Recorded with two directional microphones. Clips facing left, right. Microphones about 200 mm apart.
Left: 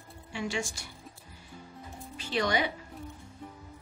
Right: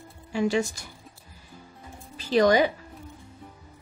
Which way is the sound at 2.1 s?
40° right (ahead or behind).